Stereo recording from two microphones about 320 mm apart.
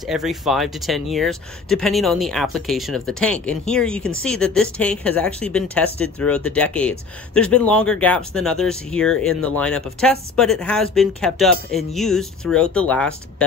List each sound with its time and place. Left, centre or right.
0.0 s a woman's voice: centre